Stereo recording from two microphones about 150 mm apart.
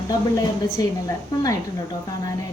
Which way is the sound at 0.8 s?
25° left (ahead or behind).